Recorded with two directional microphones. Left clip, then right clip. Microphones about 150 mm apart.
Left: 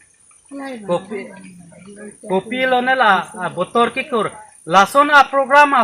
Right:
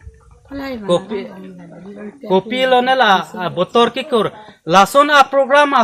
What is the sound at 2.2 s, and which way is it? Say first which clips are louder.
Speech: right 3 dB; 20° right (ahead or behind).